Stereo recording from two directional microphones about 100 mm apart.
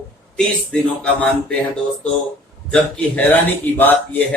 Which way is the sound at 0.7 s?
10° left (ahead or behind).